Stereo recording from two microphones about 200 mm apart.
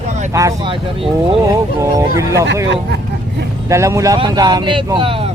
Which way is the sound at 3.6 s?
15° right (ahead or behind).